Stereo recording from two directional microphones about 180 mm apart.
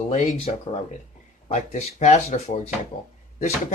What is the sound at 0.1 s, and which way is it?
Speech, 40° left (ahead or behind).